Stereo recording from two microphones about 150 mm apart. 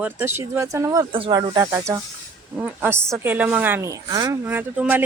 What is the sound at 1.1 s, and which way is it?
Speech, 35° right (ahead or behind).